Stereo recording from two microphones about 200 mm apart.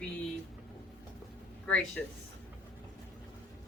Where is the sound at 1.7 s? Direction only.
5° left (ahead or behind).